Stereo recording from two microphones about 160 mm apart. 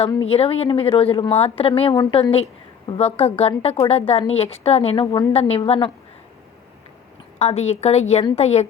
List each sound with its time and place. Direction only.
0.3 s a woman's voice: 40° left (ahead or behind)
2.0 s a woman's voice: 25° left (ahead or behind)
7.3 s a woman's voice: 45° left (ahead or behind)